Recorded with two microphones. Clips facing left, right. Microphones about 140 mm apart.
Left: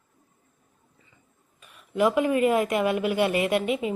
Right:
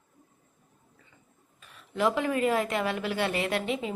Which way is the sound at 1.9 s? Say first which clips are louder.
Left 5 dB; 10° left (ahead or behind).